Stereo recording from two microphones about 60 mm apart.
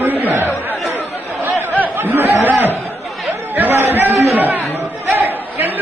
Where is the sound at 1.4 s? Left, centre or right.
Right.